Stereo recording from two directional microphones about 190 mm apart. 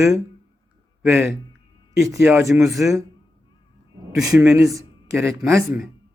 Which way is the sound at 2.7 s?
Centre (ahead or behind).